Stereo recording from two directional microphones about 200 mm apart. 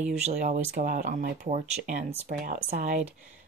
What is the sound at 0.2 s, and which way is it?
Speech, 35° right (ahead or behind).